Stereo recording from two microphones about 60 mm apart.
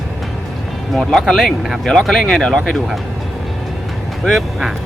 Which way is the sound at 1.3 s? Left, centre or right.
Centre.